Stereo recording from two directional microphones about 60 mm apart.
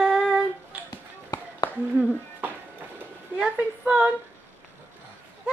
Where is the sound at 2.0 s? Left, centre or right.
Right.